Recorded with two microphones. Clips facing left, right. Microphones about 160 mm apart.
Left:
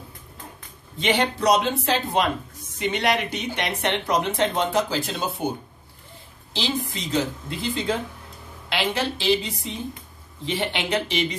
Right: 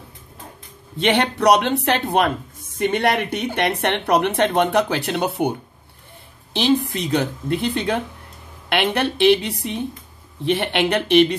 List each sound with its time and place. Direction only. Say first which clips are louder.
0.9 s speech: right 4 dB; 65° right (ahead or behind)